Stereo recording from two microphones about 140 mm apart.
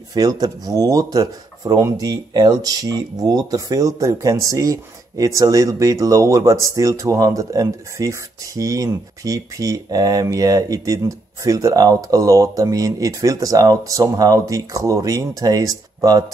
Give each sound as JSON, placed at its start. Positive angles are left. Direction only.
{"t": 0.1, "sound": "speech", "side_deg": -30}